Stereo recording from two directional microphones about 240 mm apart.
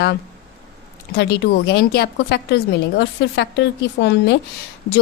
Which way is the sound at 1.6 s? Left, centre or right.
Left.